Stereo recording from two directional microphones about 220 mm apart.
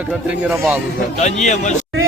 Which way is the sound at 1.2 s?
30° left (ahead or behind).